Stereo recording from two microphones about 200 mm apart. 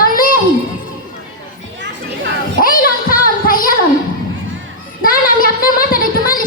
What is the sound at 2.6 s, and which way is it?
Music, 45° left (ahead or behind).